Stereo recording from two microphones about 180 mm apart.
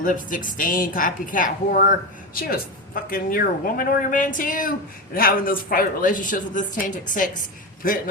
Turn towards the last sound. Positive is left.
turn(degrees=50)  # may be behind; listen again after turning